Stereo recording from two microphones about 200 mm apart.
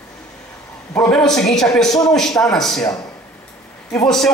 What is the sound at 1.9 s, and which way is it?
Speech, 20° left (ahead or behind).